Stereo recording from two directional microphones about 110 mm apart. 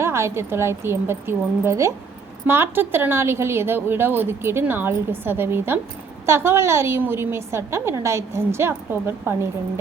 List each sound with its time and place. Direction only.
0.0 s a woman's voice: 25° right (ahead or behind)